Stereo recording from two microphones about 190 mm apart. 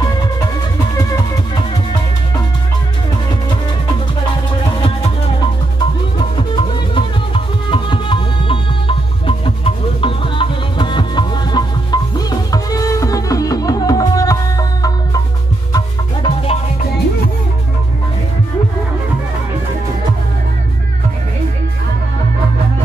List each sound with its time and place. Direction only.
0.9 s music: 20° left (ahead or behind)
4.7 s music: 25° left (ahead or behind)